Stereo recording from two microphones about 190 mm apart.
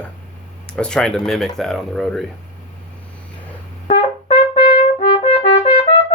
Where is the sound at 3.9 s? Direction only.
30° left (ahead or behind).